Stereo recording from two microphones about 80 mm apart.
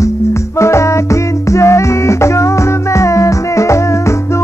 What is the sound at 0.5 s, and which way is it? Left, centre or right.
Music, left.